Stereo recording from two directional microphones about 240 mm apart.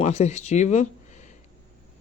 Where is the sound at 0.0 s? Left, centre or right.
Left.